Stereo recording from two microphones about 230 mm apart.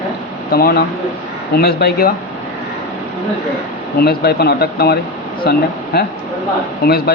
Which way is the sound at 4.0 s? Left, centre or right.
Left.